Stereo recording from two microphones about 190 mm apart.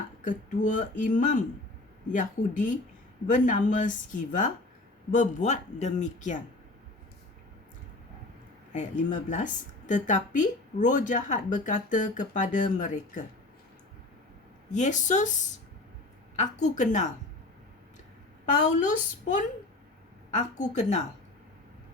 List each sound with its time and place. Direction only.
0.3 s speech: 45° left (ahead or behind)
8.7 s speech: 40° left (ahead or behind)
14.8 s speech: 40° left (ahead or behind)
18.8 s speech: 40° left (ahead or behind)
20.6 s speech: 40° left (ahead or behind)